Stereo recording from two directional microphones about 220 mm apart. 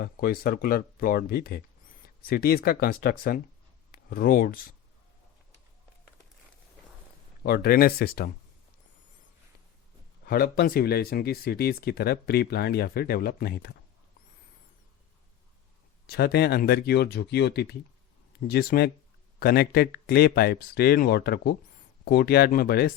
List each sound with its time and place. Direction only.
0.0 s speech: 45° left (ahead or behind)
7.4 s speech: 45° left (ahead or behind)
10.2 s speech: 45° left (ahead or behind)
16.0 s speech: 45° left (ahead or behind)